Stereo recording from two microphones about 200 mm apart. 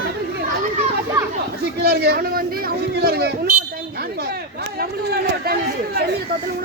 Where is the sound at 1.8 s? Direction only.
55° right (ahead or behind).